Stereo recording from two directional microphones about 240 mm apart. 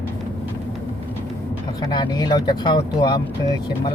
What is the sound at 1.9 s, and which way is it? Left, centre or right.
Speech, centre.